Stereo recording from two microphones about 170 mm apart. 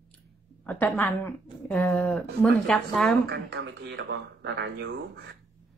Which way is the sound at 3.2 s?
80° right.